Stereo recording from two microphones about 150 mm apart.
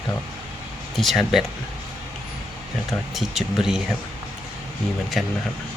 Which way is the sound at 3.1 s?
Centre (ahead or behind).